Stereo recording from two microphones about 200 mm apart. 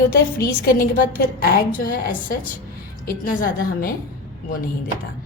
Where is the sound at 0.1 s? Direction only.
50° left (ahead or behind).